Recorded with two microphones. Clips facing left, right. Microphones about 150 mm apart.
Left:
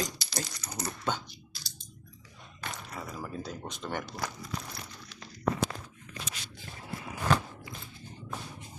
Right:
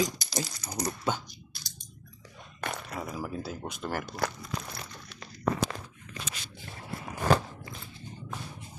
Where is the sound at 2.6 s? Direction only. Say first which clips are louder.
Right 5 dB; 60° right (ahead or behind).